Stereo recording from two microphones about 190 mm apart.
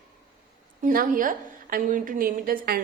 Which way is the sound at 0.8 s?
45° right (ahead or behind).